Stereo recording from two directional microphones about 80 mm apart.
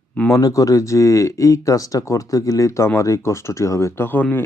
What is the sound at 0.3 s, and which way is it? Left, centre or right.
Speech, left.